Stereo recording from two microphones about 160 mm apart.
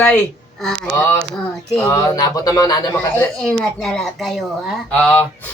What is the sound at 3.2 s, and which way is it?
Speech, 5° left (ahead or behind).